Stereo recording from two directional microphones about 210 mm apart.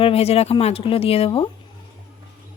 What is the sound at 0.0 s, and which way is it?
Speech, 30° left (ahead or behind).